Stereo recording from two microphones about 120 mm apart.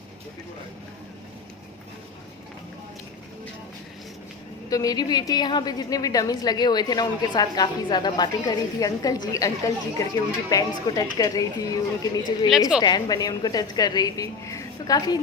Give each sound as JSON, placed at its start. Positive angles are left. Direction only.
{"t": 4.7, "sound": "a woman's voice", "side_deg": 30}